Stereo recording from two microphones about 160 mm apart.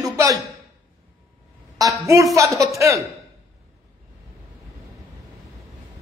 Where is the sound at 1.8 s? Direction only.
20° right (ahead or behind).